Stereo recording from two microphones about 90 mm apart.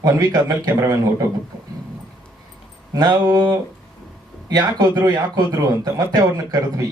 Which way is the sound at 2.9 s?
40° right (ahead or behind).